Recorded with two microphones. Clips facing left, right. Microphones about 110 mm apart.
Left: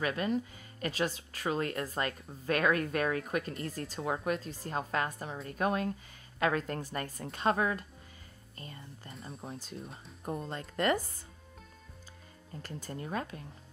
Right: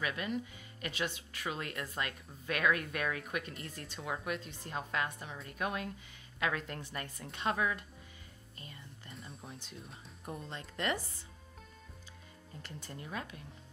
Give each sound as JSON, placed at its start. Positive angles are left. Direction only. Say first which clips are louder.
{"t": 0.0, "sound": "speech", "louder": "left 5 dB", "side_deg": 40}
{"t": 9.4, "sound": "speech", "louder": "left 6 dB", "side_deg": 35}
{"t": 9.8, "sound": "speech", "louder": "left 6 dB", "side_deg": 0}
{"t": 10.2, "sound": "speech", "louder": "left 6 dB", "side_deg": 35}
{"t": 12.6, "sound": "speech", "louder": "left 6 dB", "side_deg": 40}